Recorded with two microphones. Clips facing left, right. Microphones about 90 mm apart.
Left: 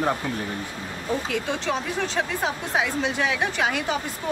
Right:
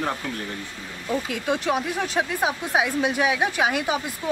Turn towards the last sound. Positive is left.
turn(degrees=-10)  # may be behind; listen again after turning